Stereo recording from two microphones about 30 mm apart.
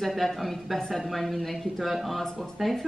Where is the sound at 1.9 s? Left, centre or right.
Centre.